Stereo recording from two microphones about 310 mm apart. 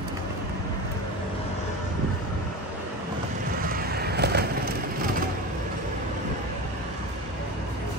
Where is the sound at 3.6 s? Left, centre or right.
Right.